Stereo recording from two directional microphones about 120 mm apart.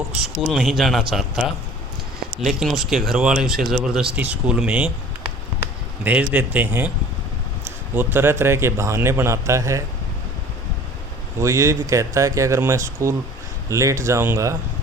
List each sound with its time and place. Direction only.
0.1 s speech: 5° right (ahead or behind)
2.4 s speech: centre (ahead or behind)
6.1 s speech: 10° right (ahead or behind)
11.3 s speech: 25° right (ahead or behind)